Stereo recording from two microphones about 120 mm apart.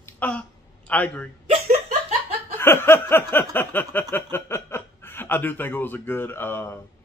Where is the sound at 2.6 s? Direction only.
20° left (ahead or behind).